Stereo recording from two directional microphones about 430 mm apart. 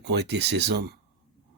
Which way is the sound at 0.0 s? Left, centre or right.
Right.